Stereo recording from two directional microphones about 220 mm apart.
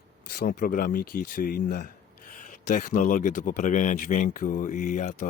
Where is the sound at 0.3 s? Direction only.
40° left (ahead or behind).